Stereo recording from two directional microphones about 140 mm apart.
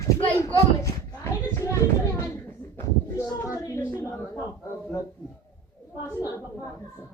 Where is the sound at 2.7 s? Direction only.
20° left (ahead or behind).